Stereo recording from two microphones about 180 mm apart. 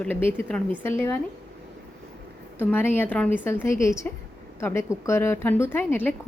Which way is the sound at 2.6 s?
10° left (ahead or behind).